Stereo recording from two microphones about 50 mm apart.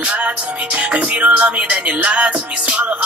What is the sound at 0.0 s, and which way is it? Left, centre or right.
Music, right.